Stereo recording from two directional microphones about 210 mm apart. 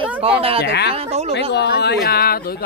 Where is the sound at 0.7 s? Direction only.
55° left (ahead or behind).